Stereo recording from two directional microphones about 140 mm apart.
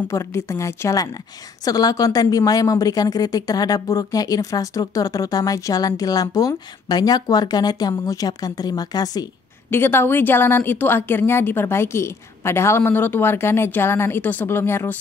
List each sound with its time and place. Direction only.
0.1 s a woman's voice: 20° left (ahead or behind)
9.7 s a woman's voice: 15° left (ahead or behind)